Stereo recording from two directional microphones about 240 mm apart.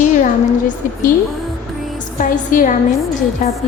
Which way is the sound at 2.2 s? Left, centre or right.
Left.